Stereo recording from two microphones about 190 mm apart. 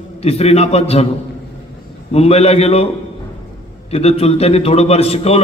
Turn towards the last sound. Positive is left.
turn(degrees=35)  # may be behind; listen again after turning